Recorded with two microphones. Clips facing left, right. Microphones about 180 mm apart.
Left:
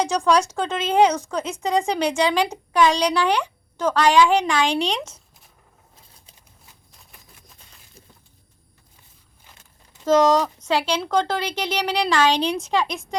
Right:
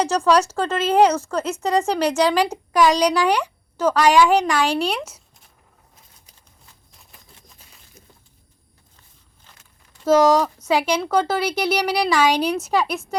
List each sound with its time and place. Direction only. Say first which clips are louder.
0.0 s speech: right 2 dB; 5° right (ahead or behind)
10.1 s speech: right 2 dB; 10° right (ahead or behind)